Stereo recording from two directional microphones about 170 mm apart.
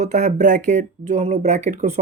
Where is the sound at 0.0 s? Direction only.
45° right (ahead or behind).